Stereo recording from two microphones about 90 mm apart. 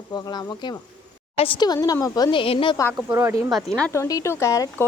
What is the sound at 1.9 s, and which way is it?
Speech, 45° left (ahead or behind).